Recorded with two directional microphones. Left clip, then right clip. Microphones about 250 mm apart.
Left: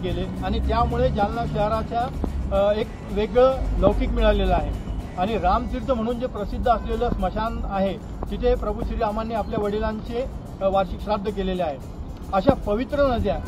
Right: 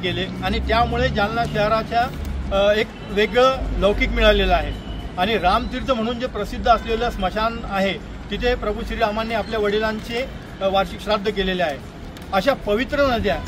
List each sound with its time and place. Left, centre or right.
0.0 s speech: right